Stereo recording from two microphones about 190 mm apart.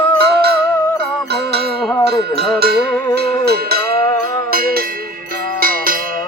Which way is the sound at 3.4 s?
55° right (ahead or behind).